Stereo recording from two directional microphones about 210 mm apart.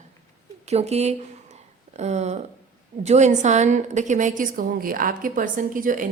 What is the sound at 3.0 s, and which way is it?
A woman's voice, 35° right (ahead or behind).